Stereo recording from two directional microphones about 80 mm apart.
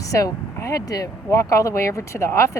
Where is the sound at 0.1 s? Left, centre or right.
Left.